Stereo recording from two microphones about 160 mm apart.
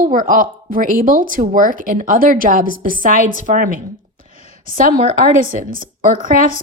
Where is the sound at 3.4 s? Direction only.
55° right (ahead or behind).